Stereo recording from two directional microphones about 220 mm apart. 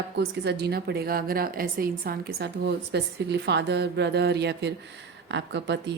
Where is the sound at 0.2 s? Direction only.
50° right (ahead or behind).